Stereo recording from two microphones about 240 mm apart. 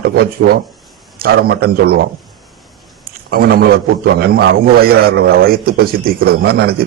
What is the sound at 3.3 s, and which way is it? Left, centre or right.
A man's voice, right.